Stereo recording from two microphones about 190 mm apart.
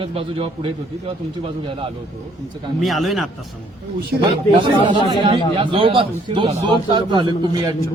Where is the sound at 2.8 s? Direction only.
Centre (ahead or behind).